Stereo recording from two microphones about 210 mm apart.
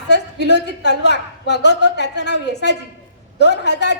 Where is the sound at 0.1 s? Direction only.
55° left (ahead or behind).